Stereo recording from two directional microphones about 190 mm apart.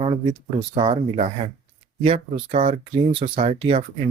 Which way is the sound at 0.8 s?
25° right (ahead or behind).